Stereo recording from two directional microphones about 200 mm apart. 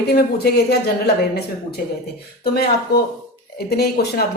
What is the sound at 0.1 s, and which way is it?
Speech, 50° left (ahead or behind).